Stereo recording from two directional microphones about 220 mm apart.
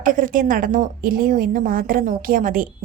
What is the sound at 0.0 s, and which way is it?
Speech, 40° right (ahead or behind).